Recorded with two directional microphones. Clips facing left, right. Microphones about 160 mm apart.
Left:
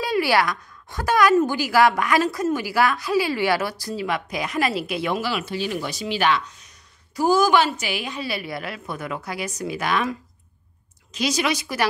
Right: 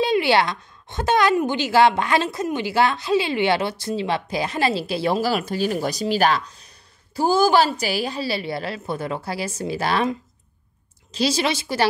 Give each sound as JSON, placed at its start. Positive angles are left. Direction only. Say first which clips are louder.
{"t": 0.0, "sound": "a woman's voice", "louder": "right 2 dB", "side_deg": -25}
{"t": 11.1, "sound": "a woman's voice", "louder": "right 2 dB", "side_deg": -30}